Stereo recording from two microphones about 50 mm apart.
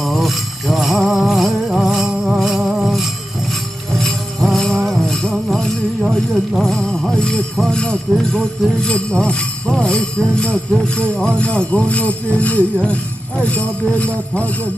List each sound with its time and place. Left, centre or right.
0.0 s a sound: centre
4.0 s music: centre
7.6 s speech: centre